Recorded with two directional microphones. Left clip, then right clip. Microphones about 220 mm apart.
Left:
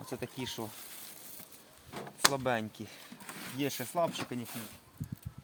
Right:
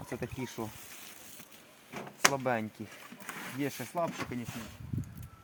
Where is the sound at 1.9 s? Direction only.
Centre (ahead or behind).